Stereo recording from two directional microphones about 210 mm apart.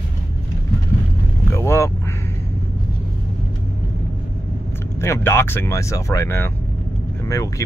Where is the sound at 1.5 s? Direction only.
10° left (ahead or behind).